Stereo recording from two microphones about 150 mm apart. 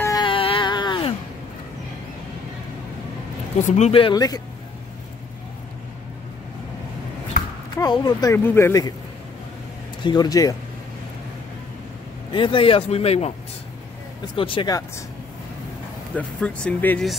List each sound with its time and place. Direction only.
0.2 s a sound: 35° left (ahead or behind)
3.6 s speech: 50° left (ahead or behind); by 4.4 s 25° left (ahead or behind)
7.7 s speech: 25° left (ahead or behind)
8.5 s speech: 15° left (ahead or behind)
10.0 s speech: 25° left (ahead or behind)
12.3 s speech: 35° left (ahead or behind)
16.2 s speech: 10° left (ahead or behind)